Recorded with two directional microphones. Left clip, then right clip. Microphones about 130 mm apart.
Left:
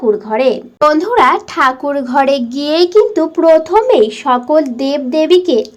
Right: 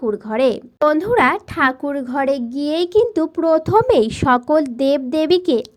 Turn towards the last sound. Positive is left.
turn(degrees=-50)  # may be behind; listen again after turning